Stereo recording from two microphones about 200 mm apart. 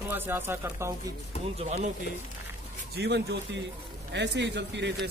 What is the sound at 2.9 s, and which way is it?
Speech, 55° right (ahead or behind).